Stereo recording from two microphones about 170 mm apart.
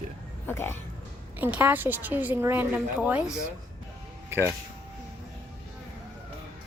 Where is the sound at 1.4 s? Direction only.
10° right (ahead or behind).